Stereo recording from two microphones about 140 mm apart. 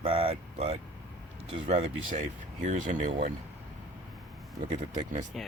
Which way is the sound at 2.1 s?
65° right (ahead or behind).